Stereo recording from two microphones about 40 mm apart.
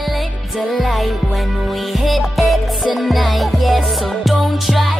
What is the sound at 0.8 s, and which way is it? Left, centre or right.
Music, centre.